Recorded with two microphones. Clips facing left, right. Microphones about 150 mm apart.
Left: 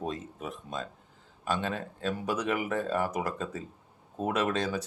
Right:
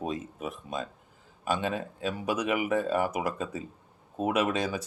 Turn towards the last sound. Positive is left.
turn(degrees=-10)  # may be behind; listen again after turning